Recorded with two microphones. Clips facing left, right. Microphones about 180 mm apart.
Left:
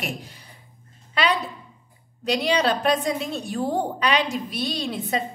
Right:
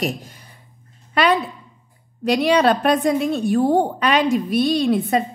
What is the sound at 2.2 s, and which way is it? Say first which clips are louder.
A woman's voice: right 6 dB; 55° right (ahead or behind).